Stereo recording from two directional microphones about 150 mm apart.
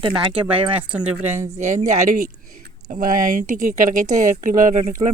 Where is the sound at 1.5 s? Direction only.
50° right (ahead or behind); by 3.4 s 75° right (ahead or behind).